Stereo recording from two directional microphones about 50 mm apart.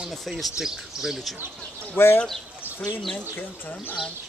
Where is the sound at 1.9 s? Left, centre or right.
Left.